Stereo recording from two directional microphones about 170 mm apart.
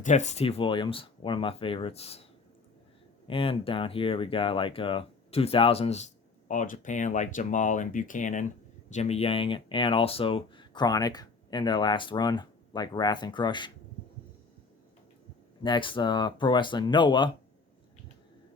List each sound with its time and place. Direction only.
0.0 s speech: 45° left (ahead or behind)
3.2 s speech: 30° left (ahead or behind)
6.5 s speech: 50° left (ahead or behind); by 13.7 s 25° left (ahead or behind)
15.6 s speech: 30° left (ahead or behind)